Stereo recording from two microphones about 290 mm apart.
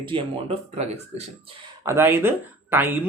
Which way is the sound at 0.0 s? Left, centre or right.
Centre.